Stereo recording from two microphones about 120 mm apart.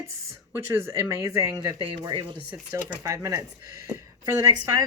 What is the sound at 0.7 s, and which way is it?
Speech, 20° right (ahead or behind).